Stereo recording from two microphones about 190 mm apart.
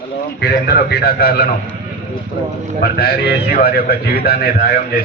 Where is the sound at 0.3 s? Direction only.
55° left (ahead or behind).